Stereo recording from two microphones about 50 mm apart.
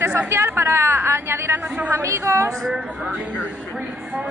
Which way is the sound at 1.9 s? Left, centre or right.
Right.